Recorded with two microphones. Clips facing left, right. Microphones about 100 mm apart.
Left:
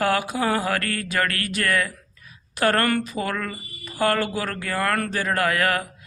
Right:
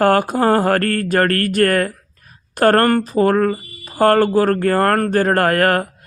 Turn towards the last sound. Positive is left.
turn(degrees=-45)  # may be behind; listen again after turning